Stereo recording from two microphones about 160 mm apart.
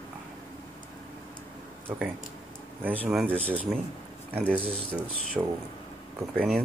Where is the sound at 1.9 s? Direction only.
10° right (ahead or behind).